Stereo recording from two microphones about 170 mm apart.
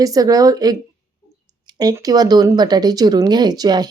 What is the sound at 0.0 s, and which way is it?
Speech, 20° right (ahead or behind).